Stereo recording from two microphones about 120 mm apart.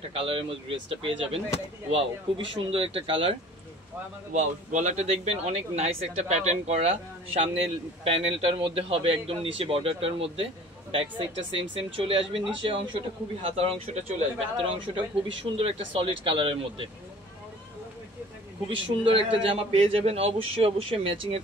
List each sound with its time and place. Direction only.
0.1 s a man's voice: 50° right (ahead or behind)
4.3 s a man's voice: 85° right; by 14.1 s 65° right (ahead or behind)
15.0 s a man's voice: 45° right (ahead or behind)
18.7 s a man's voice: 50° right (ahead or behind)